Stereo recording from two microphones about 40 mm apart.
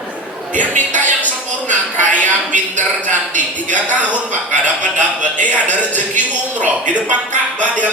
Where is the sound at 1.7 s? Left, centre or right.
Left.